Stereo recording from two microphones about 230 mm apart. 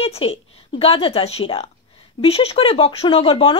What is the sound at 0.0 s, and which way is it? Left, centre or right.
Speech, left.